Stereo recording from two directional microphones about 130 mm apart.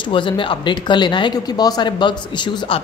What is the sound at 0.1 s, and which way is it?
A woman's voice, 40° left (ahead or behind).